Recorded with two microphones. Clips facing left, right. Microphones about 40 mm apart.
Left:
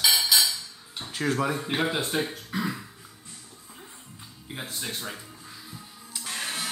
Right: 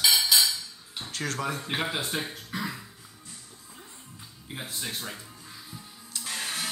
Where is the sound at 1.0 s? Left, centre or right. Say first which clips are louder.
Left 5 dB; centre.